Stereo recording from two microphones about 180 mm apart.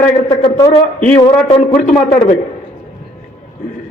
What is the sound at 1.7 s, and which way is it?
Speech, 45° left (ahead or behind).